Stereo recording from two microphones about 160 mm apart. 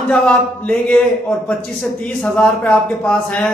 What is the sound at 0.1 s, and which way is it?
A man's voice, 5° left (ahead or behind).